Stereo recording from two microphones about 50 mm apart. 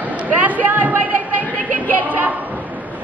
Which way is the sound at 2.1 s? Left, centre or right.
Right.